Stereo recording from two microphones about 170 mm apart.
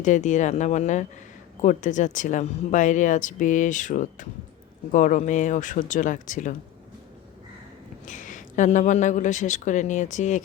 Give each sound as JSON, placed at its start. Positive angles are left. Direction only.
{"t": 0.0, "sound": "speech", "side_deg": 45}
{"t": 8.0, "sound": "speech", "side_deg": 50}